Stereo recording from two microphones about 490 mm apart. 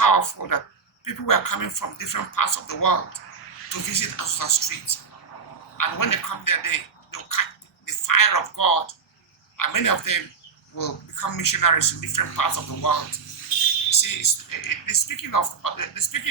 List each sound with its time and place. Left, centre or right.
0.0 s a man's voice: left